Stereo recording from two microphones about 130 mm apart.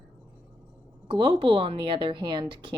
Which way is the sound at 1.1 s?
45° right (ahead or behind).